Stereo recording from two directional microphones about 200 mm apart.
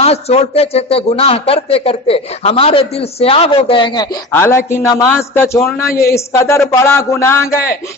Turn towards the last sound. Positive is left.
turn(degrees=15)  # may be behind; listen again after turning